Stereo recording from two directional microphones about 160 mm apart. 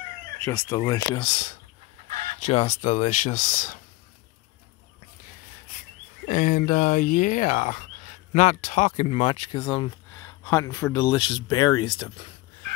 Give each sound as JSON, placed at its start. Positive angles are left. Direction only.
{"t": 0.4, "sound": "speech", "side_deg": 15}
{"t": 0.8, "sound": "speech", "side_deg": 25}
{"t": 1.2, "sound": "speech", "side_deg": 45}
{"t": 2.0, "sound": "fowl", "side_deg": -55}
{"t": 2.4, "sound": "speech", "side_deg": 45}
{"t": 6.2, "sound": "speech", "side_deg": 55}